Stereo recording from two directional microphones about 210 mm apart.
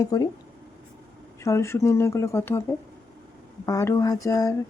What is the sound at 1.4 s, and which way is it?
Speech, 15° left (ahead or behind).